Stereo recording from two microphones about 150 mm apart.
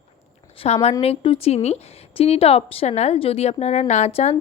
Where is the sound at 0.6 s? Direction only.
40° left (ahead or behind).